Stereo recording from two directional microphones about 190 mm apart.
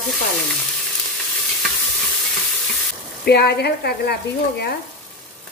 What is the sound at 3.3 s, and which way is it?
Speech, 60° left (ahead or behind).